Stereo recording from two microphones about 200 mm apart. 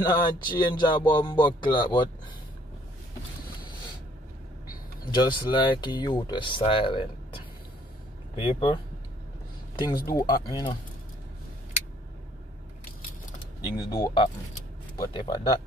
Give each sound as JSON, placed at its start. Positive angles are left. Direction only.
{"t": 0.0, "sound": "speech", "side_deg": 20}
{"t": 5.1, "sound": "speech", "side_deg": 20}
{"t": 10.0, "sound": "speech", "side_deg": 20}
{"t": 13.7, "sound": "speech", "side_deg": 20}